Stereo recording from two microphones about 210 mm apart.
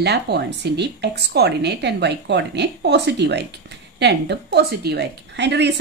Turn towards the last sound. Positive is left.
turn(degrees=-55)  # may be behind; listen again after turning